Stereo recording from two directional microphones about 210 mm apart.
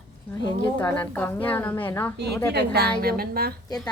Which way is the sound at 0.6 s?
5° left (ahead or behind).